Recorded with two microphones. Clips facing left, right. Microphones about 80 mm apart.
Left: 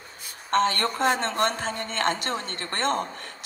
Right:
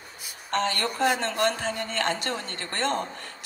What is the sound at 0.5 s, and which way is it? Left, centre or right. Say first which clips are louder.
A man's voice: left 4 dB; left.